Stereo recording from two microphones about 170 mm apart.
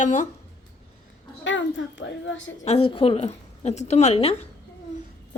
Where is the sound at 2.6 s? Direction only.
35° left (ahead or behind).